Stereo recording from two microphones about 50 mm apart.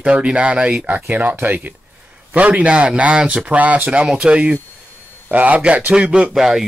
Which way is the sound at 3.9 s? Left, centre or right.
Centre.